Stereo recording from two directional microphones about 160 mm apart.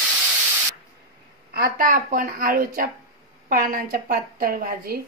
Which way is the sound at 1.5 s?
65° right (ahead or behind).